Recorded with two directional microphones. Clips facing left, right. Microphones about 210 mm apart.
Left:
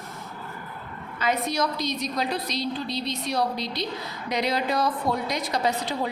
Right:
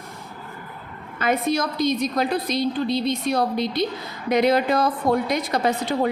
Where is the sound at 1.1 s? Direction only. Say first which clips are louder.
Right 4 dB; 50° right (ahead or behind).